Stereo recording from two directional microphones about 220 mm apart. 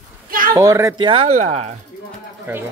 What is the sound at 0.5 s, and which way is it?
Speech, 15° right (ahead or behind).